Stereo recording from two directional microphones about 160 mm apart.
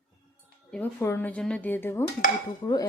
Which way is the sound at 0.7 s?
10° left (ahead or behind).